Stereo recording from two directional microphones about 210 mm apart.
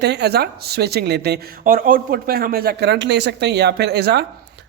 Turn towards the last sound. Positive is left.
turn(degrees=-50)  # may be behind; listen again after turning